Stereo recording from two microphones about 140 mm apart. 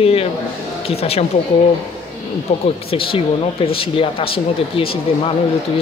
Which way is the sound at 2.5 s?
60° left (ahead or behind).